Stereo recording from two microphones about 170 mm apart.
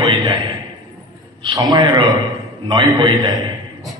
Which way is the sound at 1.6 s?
25° right (ahead or behind).